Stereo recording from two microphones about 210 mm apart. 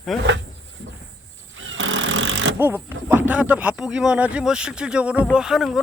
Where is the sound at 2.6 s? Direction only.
10° right (ahead or behind).